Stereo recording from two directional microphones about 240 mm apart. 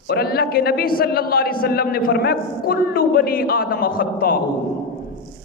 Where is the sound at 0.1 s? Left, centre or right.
Left.